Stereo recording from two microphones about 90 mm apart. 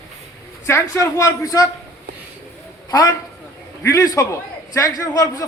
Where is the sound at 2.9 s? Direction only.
45° left (ahead or behind).